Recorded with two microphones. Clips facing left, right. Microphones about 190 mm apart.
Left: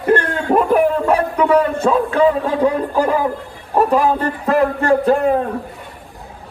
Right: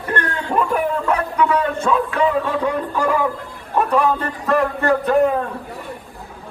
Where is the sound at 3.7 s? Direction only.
35° left (ahead or behind).